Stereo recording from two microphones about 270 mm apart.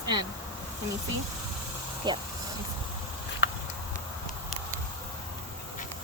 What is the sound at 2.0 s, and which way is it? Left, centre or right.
Speech, centre.